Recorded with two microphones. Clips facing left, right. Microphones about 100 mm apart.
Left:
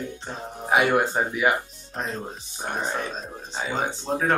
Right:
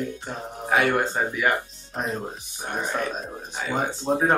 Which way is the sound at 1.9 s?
15° right (ahead or behind).